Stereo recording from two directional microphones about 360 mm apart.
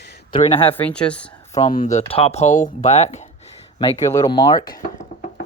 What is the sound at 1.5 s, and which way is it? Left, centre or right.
Speech, centre.